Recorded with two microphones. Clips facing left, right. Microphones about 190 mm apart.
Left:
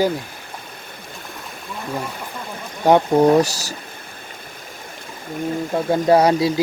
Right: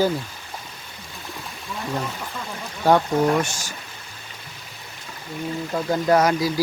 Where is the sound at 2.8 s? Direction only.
20° left (ahead or behind).